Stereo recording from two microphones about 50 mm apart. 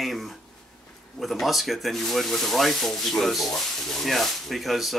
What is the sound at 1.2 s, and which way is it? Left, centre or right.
Speech, centre.